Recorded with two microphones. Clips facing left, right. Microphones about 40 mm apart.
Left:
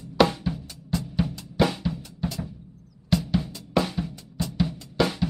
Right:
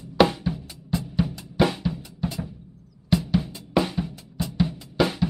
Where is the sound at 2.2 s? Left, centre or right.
Centre.